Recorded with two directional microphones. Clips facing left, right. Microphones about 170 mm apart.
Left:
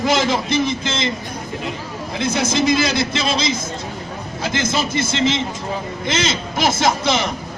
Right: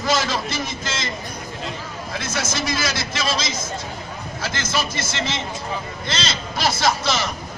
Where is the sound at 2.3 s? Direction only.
15° left (ahead or behind).